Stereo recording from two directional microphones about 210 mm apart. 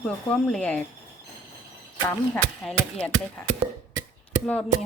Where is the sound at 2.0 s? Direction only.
5° left (ahead or behind).